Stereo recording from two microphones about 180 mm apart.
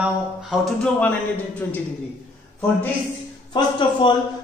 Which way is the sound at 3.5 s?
25° left (ahead or behind).